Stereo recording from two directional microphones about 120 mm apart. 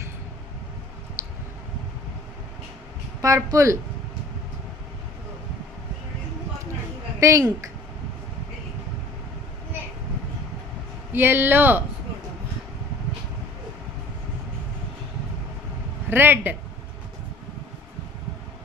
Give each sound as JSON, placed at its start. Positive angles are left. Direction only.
{"t": 1.2, "sound": "a sound", "side_deg": -20}
{"t": 3.2, "sound": "speech", "side_deg": -30}
{"t": 7.2, "sound": "speech", "side_deg": -25}
{"t": 11.1, "sound": "speech", "side_deg": -20}
{"t": 16.0, "sound": "speech", "side_deg": -20}